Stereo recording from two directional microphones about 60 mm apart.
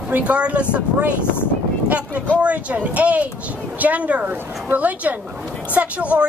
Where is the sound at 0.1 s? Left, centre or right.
Right.